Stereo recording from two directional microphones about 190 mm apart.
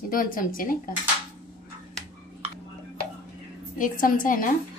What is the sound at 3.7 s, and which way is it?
Speech, 45° left (ahead or behind).